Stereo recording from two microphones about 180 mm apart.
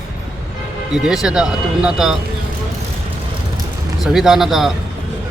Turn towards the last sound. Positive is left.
turn(degrees=0)  # may be behind; listen again after turning